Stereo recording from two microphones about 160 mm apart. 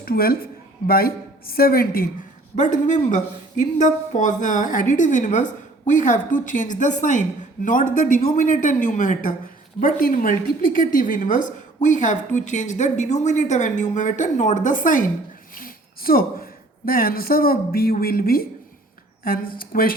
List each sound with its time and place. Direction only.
0.0 s a man's voice: 70° left (ahead or behind)
2.6 s a woman's voice: 50° left (ahead or behind)